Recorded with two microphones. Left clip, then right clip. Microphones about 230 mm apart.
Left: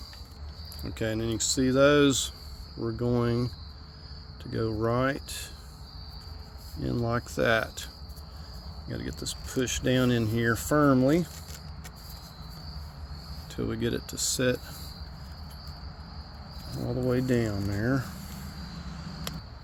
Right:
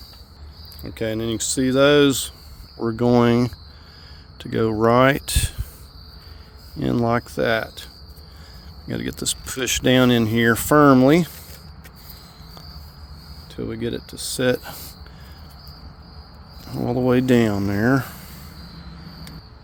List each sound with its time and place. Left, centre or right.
0.8 s speech: centre
2.8 s speech: right
6.7 s speech: right
7.3 s speech: centre
8.9 s speech: right
13.5 s speech: centre
16.8 s speech: right